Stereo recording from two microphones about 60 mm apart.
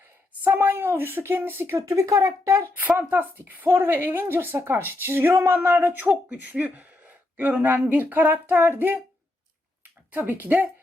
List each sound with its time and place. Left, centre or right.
0.4 s a woman's voice: right
1.9 s speech: right
2.7 s a woman's voice: right
10.1 s a woman's voice: right